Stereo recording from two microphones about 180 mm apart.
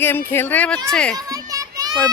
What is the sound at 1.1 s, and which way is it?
Children playing, 20° right (ahead or behind).